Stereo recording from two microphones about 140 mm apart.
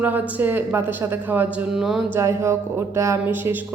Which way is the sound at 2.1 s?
20° right (ahead or behind).